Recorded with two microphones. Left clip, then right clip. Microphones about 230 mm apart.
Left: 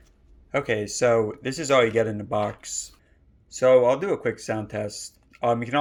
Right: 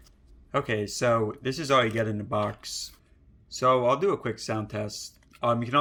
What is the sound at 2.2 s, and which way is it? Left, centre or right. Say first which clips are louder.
Speech: left 3 dB; centre.